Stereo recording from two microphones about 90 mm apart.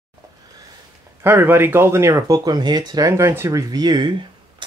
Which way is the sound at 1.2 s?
25° right (ahead or behind).